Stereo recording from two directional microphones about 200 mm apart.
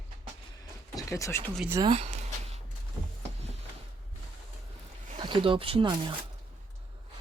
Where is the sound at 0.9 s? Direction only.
15° left (ahead or behind).